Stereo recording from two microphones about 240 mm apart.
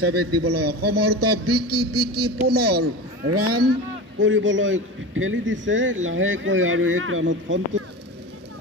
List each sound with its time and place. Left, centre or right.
0.0 s a man's voice: right
2.3 s speech: right
3.3 s a man's voice: right
4.2 s a man's voice: right